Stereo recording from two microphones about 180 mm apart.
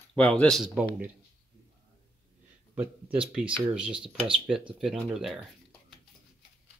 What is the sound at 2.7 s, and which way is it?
Speech, 5° right (ahead or behind).